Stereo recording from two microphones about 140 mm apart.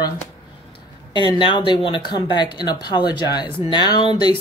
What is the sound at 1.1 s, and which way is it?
Speech, 35° left (ahead or behind).